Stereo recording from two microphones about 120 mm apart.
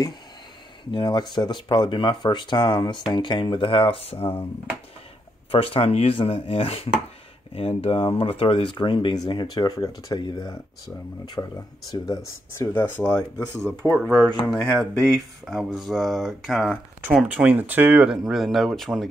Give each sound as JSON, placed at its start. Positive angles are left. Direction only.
{"t": 0.9, "sound": "speech", "side_deg": 35}
{"t": 5.5, "sound": "speech", "side_deg": 50}
{"t": 12.5, "sound": "speech", "side_deg": 20}
{"t": 13.8, "sound": "speech", "side_deg": -15}
{"t": 15.4, "sound": "speech", "side_deg": 0}